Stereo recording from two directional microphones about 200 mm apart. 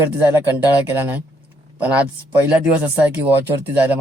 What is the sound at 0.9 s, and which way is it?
Speech, 10° right (ahead or behind).